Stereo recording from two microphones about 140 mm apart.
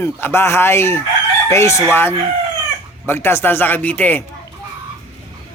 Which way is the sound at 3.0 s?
15° left (ahead or behind).